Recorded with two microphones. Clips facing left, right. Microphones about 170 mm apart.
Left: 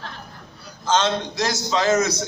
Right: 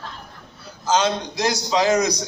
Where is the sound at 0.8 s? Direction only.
10° right (ahead or behind).